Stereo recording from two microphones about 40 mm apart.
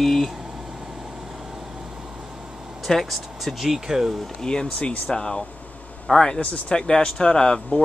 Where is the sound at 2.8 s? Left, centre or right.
Centre.